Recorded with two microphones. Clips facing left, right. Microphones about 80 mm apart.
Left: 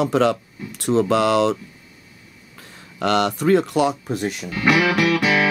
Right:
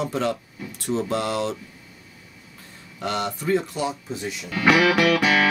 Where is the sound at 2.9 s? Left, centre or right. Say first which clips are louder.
Left 7 dB; left.